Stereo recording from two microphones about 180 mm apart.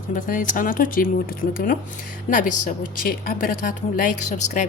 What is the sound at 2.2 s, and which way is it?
A woman's voice, 45° left (ahead or behind).